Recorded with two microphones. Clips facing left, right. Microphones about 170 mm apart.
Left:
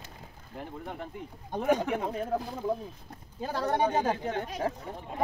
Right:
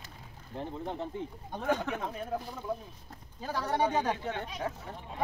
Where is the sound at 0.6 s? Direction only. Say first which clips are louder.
Right 3 dB; 25° right (ahead or behind).